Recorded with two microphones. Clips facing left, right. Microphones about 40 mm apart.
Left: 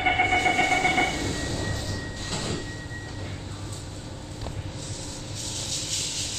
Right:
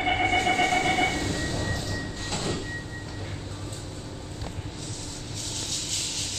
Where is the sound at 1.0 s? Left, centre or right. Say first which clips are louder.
Right 1 dB; centre.